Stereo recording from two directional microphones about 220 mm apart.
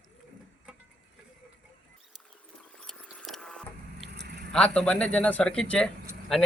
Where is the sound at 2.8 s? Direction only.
5° left (ahead or behind).